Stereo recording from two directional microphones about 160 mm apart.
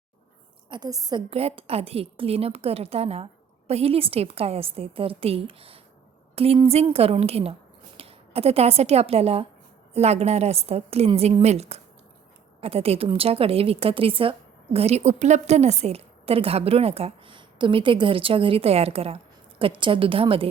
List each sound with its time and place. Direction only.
0.7 s a woman's voice: 25° right (ahead or behind)
1.3 s a woman's voice: 40° right (ahead or behind)